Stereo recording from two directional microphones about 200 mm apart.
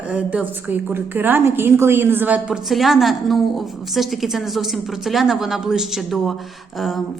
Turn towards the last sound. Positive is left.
turn(degrees=0)  # may be behind; listen again after turning